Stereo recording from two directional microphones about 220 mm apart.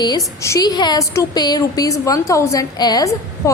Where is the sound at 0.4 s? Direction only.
15° left (ahead or behind).